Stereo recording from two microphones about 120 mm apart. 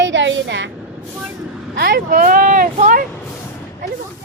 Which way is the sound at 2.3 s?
90° right.